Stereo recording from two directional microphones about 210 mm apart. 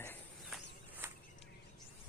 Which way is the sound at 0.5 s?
Centre (ahead or behind).